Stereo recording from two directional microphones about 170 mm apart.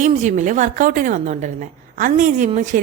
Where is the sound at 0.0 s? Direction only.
45° right (ahead or behind).